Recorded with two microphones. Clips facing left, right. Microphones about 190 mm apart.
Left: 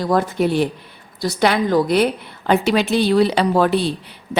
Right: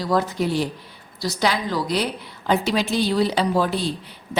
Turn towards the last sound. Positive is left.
turn(degrees=65)  # may be behind; listen again after turning